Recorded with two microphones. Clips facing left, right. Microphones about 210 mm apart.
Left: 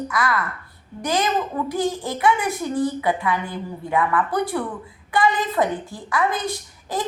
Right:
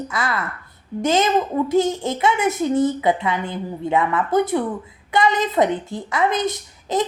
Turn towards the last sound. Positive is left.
turn(degrees=-20)  # may be behind; listen again after turning